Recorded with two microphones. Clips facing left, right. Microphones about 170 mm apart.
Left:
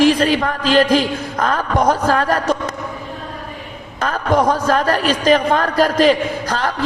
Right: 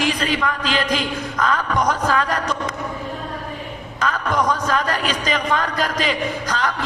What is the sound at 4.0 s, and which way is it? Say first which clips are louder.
A man's voice: left 5 dB; 45° left (ahead or behind).